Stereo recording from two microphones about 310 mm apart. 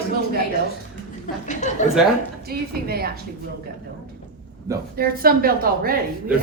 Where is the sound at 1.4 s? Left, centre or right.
Left.